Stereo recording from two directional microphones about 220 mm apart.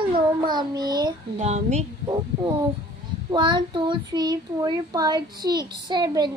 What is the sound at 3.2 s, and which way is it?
A child's voice, 20° right (ahead or behind).